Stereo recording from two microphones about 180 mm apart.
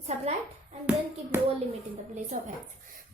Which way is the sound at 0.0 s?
35° right (ahead or behind).